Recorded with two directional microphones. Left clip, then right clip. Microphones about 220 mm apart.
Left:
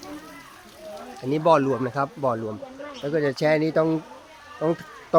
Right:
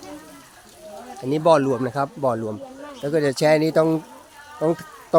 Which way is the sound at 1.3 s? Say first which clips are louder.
Right 2 dB; 20° right (ahead or behind).